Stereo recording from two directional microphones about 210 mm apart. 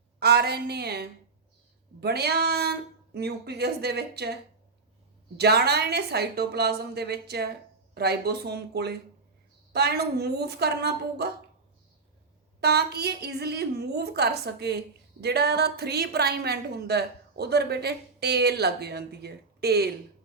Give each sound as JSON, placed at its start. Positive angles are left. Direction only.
{"t": 0.2, "sound": "a woman's voice", "side_deg": -50}
{"t": 5.4, "sound": "a woman's voice", "side_deg": -50}
{"t": 12.5, "sound": "a woman's voice", "side_deg": -50}